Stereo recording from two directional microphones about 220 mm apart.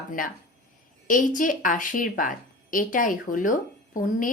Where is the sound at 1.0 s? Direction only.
35° left (ahead or behind).